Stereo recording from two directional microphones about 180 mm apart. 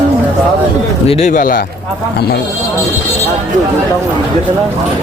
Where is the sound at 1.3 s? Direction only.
50° left (ahead or behind).